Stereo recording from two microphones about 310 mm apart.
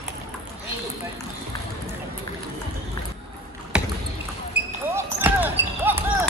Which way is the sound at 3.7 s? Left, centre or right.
Centre.